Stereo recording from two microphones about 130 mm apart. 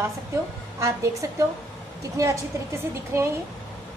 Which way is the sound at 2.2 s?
25° right (ahead or behind).